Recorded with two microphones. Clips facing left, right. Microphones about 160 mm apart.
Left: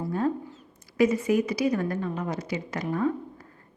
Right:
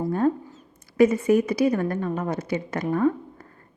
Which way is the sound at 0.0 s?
45° right (ahead or behind).